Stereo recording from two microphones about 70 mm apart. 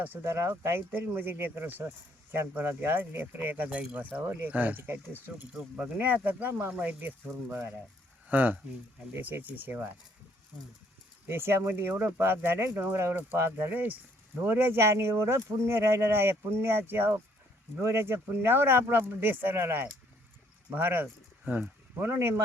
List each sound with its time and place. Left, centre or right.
0.0 s speech: right
11.3 s speech: right
21.9 s speech: right